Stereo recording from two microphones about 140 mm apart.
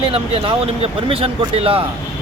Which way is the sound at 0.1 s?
40° right (ahead or behind).